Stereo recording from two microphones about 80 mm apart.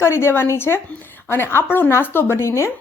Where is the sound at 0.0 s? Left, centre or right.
Left.